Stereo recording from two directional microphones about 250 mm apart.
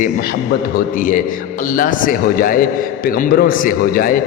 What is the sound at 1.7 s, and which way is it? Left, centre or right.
Speech, left.